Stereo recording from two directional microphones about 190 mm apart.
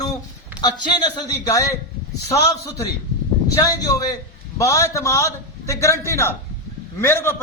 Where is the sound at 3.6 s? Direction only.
20° left (ahead or behind).